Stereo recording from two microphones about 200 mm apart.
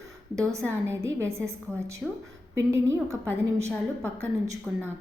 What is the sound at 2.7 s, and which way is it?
A woman's voice, 15° right (ahead or behind).